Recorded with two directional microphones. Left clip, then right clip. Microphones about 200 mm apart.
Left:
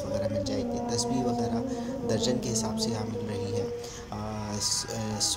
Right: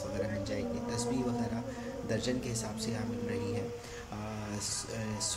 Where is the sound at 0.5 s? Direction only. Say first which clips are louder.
Left 6 dB; 25° left (ahead or behind).